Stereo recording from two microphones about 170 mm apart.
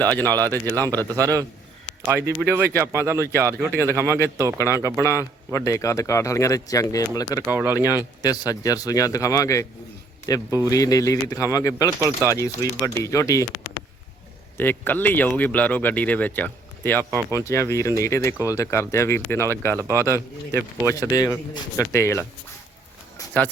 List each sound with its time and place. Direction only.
0.1 s speech: 10° left (ahead or behind)
0.6 s speech: 20° right (ahead or behind)
4.9 s a man's voice: 15° left (ahead or behind)
7.4 s speech: 10° right (ahead or behind)
8.2 s a man's voice: 20° left (ahead or behind)
11.9 s speech: 15° right (ahead or behind)
12.3 s speech: 15° left (ahead or behind)
14.6 s speech: 10° left (ahead or behind)
17.1 s speech: 20° right (ahead or behind)
17.4 s speech: 15° left (ahead or behind)
19.7 s speech: 15° right (ahead or behind)
20.8 s speech: 20° left (ahead or behind)